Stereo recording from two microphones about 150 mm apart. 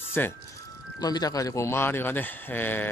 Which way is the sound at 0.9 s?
25° left (ahead or behind).